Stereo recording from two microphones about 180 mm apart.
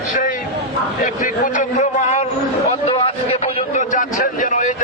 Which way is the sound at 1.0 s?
45° left (ahead or behind).